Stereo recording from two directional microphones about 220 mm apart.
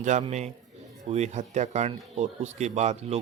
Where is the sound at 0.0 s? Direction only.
30° right (ahead or behind).